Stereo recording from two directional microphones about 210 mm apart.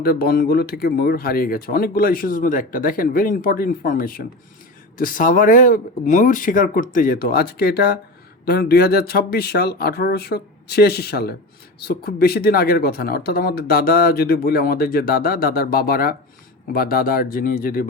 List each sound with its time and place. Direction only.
0.0 s speech: 45° left (ahead or behind)